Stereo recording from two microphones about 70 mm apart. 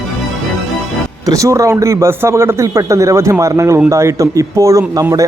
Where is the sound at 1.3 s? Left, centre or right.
Right.